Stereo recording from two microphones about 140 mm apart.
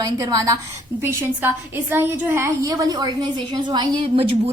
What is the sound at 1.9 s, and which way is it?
A woman's voice, 15° right (ahead or behind).